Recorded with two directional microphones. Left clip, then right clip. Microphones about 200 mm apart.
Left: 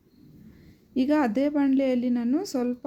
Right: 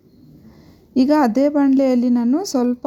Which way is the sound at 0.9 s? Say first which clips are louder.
Right 8 dB; 25° right (ahead or behind).